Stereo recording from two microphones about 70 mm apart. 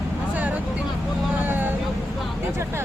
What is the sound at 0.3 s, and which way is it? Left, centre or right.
Vehicle, right.